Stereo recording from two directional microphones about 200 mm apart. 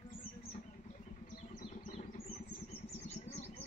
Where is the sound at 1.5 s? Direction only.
40° left (ahead or behind).